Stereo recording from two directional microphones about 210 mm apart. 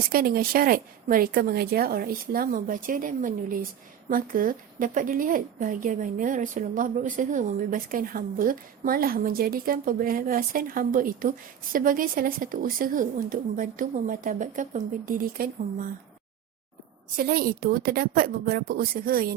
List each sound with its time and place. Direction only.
0.1 s a woman's voice: 45° right (ahead or behind)
17.2 s a woman's voice: 45° right (ahead or behind)